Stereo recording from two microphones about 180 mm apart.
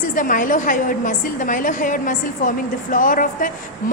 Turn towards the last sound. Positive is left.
turn(degrees=50)  # may be behind; listen again after turning